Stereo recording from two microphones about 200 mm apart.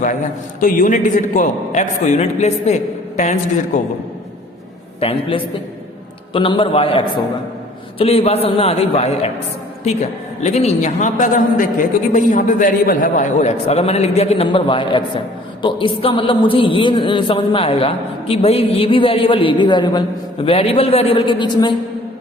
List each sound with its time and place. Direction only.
0.6 s a man's voice: 40° left (ahead or behind)
4.9 s a man's voice: 30° left (ahead or behind)
10.4 s a man's voice: 30° left (ahead or behind)